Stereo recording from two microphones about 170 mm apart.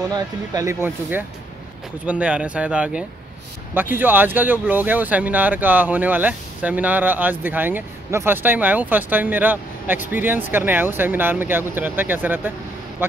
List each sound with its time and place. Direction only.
0.1 s speech: 20° right (ahead or behind)